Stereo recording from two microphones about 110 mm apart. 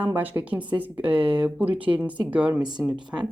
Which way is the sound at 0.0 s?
15° right (ahead or behind).